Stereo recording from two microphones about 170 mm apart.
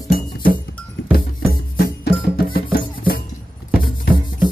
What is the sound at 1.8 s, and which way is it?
Music, 65° left (ahead or behind).